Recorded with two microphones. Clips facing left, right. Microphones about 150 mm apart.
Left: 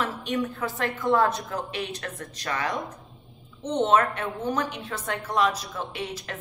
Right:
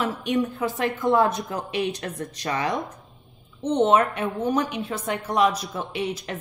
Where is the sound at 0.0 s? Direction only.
20° right (ahead or behind).